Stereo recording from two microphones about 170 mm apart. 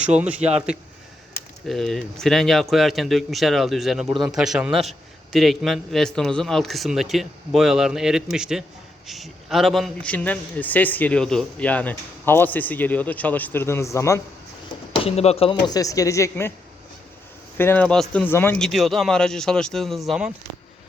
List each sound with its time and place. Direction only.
0.0 s a man's voice: 5° right (ahead or behind); by 14.2 s 15° left (ahead or behind)
14.9 s speech: 35° left (ahead or behind); by 16.5 s 20° left (ahead or behind)
17.6 s speech: 10° left (ahead or behind)